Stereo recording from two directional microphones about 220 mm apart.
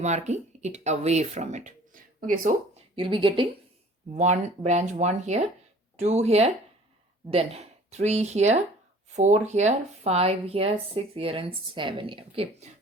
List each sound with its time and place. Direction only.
0.0 s speech: 30° right (ahead or behind)
2.9 s speech: 25° right (ahead or behind)